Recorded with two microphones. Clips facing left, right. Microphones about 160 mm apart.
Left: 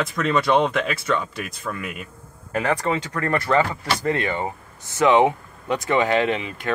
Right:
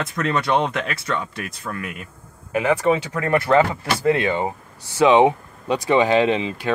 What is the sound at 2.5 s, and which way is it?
Speech, 10° right (ahead or behind).